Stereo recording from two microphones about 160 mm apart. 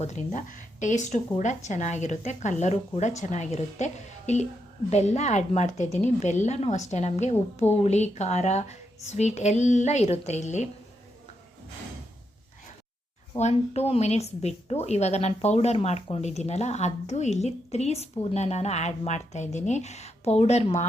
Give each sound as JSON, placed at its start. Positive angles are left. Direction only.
{"t": 0.0, "sound": "a woman's voice", "side_deg": 50}
{"t": 13.3, "sound": "a woman's voice", "side_deg": 40}